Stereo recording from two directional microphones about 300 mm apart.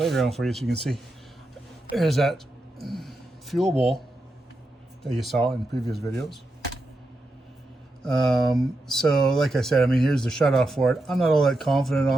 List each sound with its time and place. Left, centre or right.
0.0 s a man's voice: centre
5.1 s speech: centre
8.0 s speech: centre